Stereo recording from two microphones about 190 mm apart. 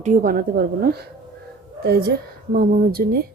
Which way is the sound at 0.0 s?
45° right (ahead or behind).